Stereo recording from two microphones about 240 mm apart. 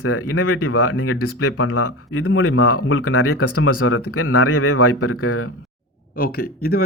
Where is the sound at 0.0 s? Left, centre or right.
Left.